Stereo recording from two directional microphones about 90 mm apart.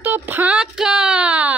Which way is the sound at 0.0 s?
20° right (ahead or behind).